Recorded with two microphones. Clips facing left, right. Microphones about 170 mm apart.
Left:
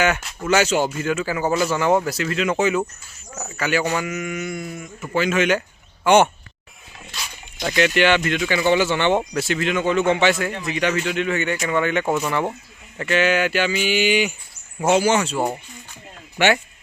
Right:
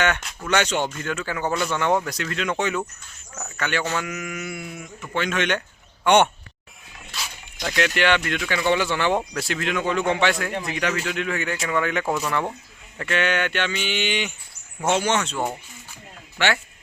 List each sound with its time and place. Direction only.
0.0 s speech: 5° left (ahead or behind)